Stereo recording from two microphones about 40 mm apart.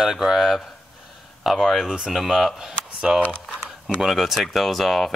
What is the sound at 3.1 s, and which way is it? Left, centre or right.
Speech, right.